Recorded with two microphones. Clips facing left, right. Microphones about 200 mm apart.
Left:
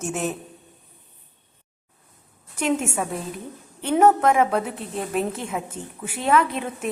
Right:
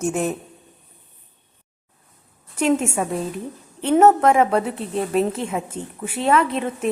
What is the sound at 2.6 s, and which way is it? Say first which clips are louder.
Speech: right 4 dB; 5° left (ahead or behind).